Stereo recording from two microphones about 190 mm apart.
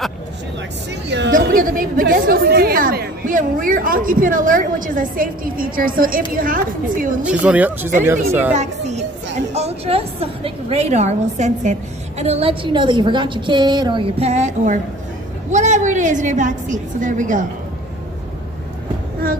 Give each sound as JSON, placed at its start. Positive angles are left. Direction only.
{"t": 1.0, "sound": "a woman's voice", "side_deg": -65}
{"t": 1.3, "sound": "a woman's voice", "side_deg": -45}
{"t": 7.2, "sound": "speech", "side_deg": -5}
{"t": 8.5, "sound": "a sound", "side_deg": -35}
{"t": 9.5, "sound": "a woman's voice", "side_deg": -35}